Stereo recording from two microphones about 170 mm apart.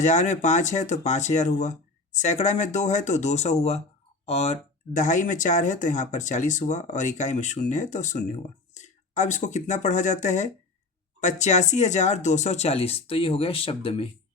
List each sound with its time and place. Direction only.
0.0 s speech: 45° left (ahead or behind)